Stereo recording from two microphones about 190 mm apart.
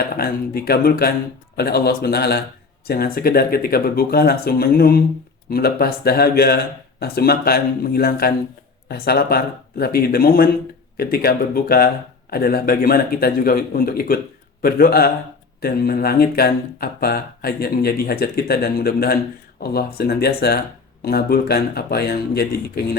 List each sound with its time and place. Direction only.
0.2 s speech: 55° left (ahead or behind)